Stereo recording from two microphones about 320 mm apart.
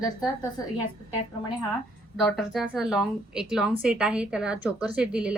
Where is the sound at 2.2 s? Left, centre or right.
Centre.